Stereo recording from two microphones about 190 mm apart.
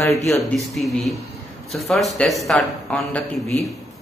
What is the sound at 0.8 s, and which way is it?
Speech, centre (ahead or behind).